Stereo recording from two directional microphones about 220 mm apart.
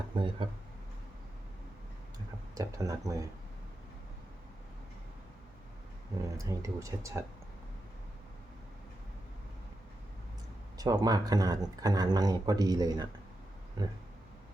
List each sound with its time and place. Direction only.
0.1 s speech: 20° right (ahead or behind)
2.6 s speech: 15° right (ahead or behind)
6.3 s speech: 15° right (ahead or behind)
10.8 s speech: 15° right (ahead or behind)
13.8 s a sound: 20° right (ahead or behind)